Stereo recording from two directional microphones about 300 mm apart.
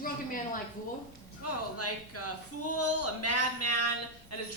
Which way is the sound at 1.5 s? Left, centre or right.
Left.